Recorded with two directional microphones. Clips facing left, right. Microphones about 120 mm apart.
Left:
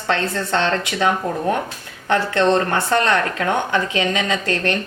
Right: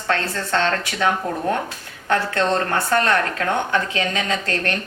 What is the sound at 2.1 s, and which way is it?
Speech, 20° left (ahead or behind).